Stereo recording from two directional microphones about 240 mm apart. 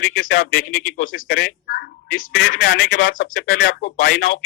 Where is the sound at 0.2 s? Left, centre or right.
Left.